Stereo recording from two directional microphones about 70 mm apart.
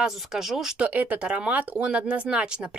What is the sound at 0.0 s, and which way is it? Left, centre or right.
Speech, centre.